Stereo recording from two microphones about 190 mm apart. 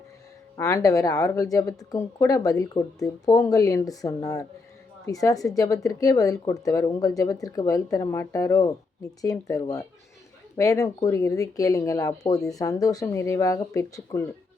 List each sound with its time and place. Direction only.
0.5 s speech: 20° left (ahead or behind)